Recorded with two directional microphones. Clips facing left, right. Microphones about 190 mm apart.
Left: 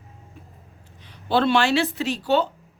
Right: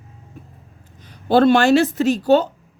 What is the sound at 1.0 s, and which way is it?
Speech, 45° right (ahead or behind).